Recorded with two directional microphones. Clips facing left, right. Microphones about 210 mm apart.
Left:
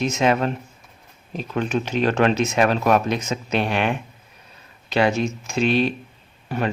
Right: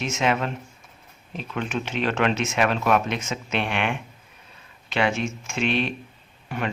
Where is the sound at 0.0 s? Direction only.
40° left (ahead or behind).